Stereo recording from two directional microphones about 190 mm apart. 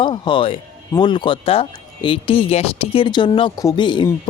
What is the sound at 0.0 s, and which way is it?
Speech, 25° left (ahead or behind).